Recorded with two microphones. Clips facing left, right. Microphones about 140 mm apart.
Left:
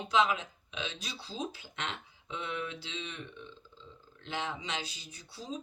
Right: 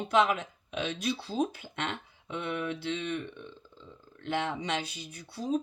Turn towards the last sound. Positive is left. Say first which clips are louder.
# right 10 dB
turn(degrees=-55)  # may be behind; listen again after turning